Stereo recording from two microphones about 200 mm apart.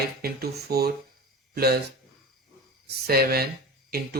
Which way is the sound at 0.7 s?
50° right (ahead or behind).